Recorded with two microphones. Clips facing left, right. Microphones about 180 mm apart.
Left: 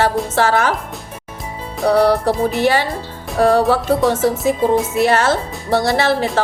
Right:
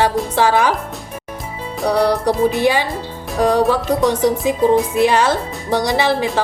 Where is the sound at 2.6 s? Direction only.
15° right (ahead or behind).